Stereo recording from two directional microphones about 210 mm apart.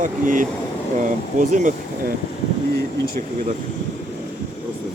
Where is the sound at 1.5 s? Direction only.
35° right (ahead or behind).